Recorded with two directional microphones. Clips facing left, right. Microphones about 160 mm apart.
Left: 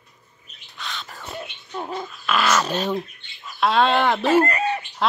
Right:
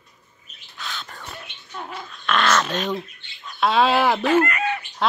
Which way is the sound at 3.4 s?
Centre (ahead or behind).